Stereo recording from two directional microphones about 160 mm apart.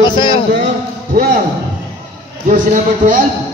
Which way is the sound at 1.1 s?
65° right (ahead or behind).